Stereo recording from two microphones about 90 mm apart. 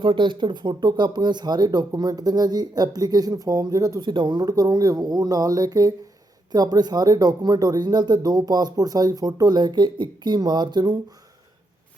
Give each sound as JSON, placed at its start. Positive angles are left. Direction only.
{"t": 0.0, "sound": "speech", "side_deg": -70}
{"t": 4.0, "sound": "speech", "side_deg": -55}